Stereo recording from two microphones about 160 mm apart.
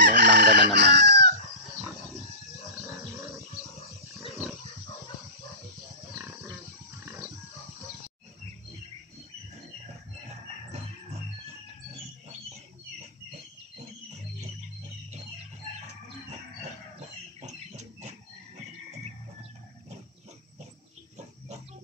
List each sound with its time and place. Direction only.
0.0 s chicken: 90° right
17.4 s pig: 45° right (ahead or behind)